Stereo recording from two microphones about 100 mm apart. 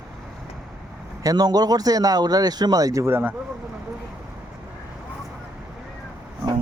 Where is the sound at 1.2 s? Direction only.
40° right (ahead or behind).